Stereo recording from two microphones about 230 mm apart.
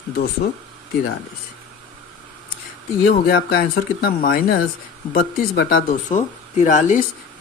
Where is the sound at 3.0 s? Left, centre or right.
Left.